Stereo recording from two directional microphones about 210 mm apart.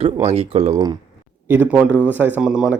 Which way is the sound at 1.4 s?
10° right (ahead or behind).